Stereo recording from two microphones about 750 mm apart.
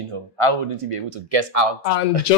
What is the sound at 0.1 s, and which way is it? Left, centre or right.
Speech, right.